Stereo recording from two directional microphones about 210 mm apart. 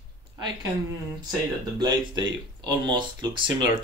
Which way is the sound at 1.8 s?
20° right (ahead or behind).